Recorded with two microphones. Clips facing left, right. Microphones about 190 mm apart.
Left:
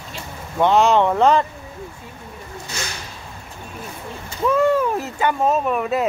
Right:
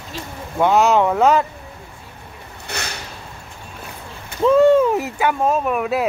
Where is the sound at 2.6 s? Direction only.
65° right (ahead or behind).